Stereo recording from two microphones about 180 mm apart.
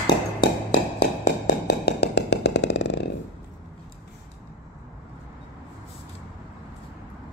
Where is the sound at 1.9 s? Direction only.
70° left (ahead or behind).